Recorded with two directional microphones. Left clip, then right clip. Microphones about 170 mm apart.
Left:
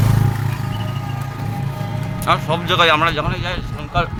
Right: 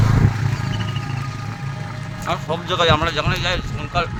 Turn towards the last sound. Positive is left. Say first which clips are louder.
# left 1 dB
turn(degrees=-20)  # may be behind; listen again after turning